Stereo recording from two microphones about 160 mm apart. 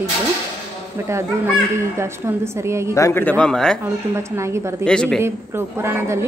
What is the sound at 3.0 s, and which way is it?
Speech, 15° left (ahead or behind).